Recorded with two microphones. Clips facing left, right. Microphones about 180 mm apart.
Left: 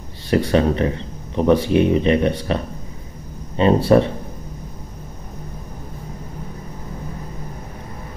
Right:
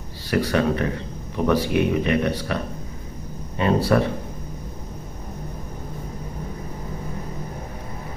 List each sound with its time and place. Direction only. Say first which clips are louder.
0.3 s speech: left 4 dB; 25° left (ahead or behind)